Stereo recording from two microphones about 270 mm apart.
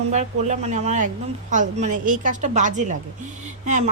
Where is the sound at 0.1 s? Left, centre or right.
Right.